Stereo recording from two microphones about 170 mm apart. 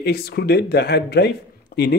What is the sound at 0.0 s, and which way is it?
Speech, 70° left (ahead or behind).